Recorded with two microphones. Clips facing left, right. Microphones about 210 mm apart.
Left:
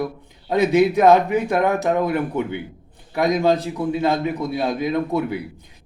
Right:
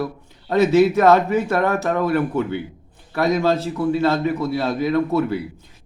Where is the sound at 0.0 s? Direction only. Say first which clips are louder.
Even; 15° left (ahead or behind).